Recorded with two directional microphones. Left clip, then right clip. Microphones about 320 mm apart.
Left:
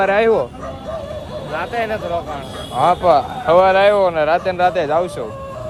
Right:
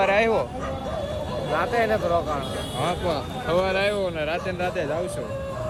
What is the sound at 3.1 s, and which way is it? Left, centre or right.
Speech, left.